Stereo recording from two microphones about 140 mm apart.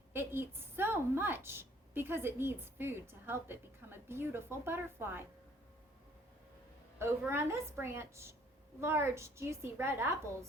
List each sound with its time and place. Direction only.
0.1 s a woman's voice: 15° right (ahead or behind)
7.3 s a woman's voice: 20° right (ahead or behind)